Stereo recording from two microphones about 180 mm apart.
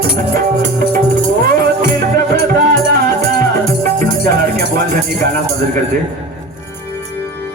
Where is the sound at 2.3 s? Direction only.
55° right (ahead or behind).